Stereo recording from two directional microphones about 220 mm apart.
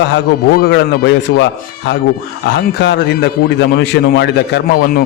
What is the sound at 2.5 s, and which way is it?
A man's voice, 50° left (ahead or behind).